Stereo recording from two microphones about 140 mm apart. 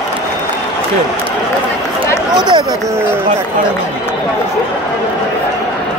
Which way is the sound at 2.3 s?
30° right (ahead or behind).